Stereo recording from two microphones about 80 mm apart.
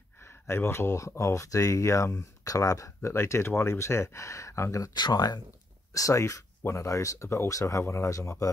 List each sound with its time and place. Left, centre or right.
0.2 s speech: left
4.9 s speech: left
5.9 s speech: left